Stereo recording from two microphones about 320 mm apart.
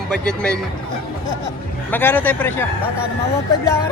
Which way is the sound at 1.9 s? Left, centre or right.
Centre.